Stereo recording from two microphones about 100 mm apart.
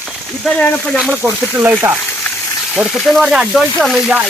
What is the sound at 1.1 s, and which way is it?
Speech, 15° right (ahead or behind).